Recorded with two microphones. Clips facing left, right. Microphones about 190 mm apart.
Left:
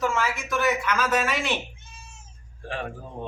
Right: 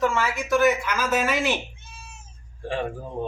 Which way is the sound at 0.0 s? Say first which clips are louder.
Right 2 dB; centre (ahead or behind).